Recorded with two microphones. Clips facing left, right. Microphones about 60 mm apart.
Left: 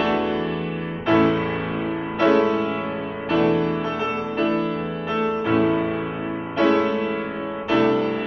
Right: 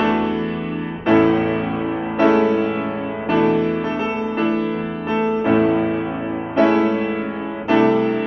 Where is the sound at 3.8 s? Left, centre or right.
Right.